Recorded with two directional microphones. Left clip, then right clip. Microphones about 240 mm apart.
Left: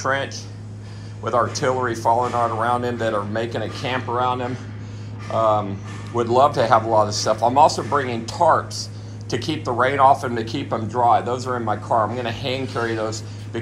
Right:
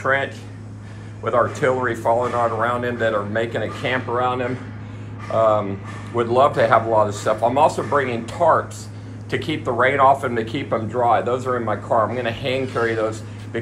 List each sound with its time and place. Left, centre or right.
1.2 s a man's voice: centre